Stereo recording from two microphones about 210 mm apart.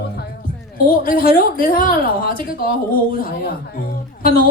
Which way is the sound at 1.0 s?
45° left (ahead or behind).